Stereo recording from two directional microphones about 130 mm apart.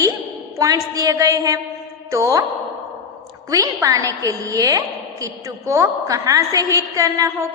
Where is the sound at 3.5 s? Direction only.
25° right (ahead or behind).